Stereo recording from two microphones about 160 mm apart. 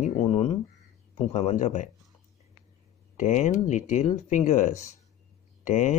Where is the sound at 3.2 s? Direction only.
50° left (ahead or behind).